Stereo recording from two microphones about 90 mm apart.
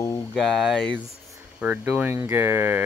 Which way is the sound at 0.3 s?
5° left (ahead or behind).